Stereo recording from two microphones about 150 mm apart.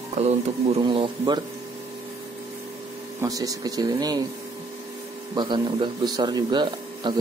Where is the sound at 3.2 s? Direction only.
25° right (ahead or behind).